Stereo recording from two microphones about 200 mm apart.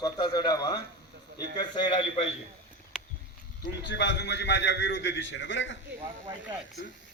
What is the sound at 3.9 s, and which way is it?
A man's voice, 60° left (ahead or behind).